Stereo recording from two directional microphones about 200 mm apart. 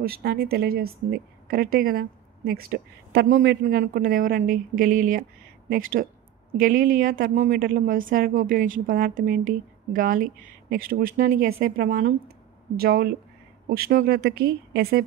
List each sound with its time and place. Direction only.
0.0 s speech: 50° right (ahead or behind)